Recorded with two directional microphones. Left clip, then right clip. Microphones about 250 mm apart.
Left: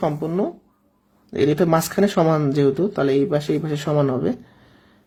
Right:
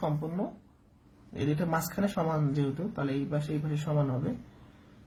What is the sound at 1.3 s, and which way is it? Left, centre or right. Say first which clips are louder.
Speech: left 14 dB; left.